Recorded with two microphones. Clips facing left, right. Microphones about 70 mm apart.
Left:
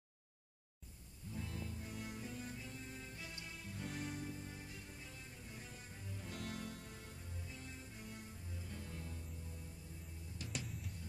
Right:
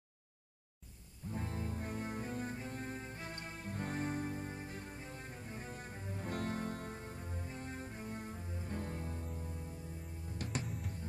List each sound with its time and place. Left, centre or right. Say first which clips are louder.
1.3 s music: right 6 dB; right